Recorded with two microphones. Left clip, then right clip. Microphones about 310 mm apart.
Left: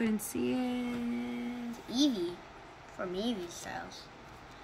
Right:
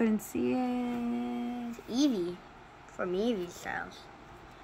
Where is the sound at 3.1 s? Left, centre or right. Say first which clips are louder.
Right 6 dB; right.